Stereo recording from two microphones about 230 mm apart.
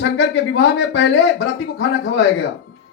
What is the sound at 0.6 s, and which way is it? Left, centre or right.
Speech, left.